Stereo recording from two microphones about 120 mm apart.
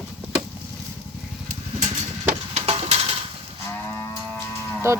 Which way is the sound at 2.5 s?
60° right (ahead or behind).